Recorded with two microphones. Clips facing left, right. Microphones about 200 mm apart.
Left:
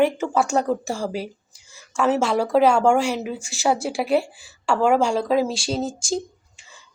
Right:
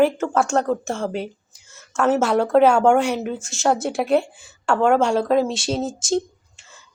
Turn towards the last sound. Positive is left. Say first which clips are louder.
# right 2 dB
turn(degrees=0)  # may be behind; listen again after turning